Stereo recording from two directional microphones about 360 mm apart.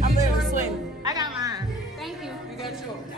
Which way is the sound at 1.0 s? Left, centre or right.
Centre.